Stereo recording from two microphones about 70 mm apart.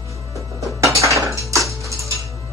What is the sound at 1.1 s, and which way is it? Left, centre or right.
Music, right.